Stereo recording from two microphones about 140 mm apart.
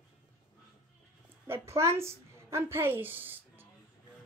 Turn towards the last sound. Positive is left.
turn(degrees=-15)  # may be behind; listen again after turning